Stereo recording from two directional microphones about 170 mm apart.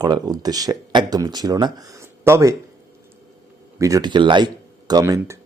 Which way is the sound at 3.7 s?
20° right (ahead or behind).